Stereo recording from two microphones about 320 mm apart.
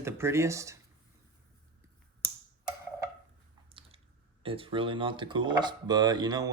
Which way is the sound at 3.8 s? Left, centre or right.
Centre.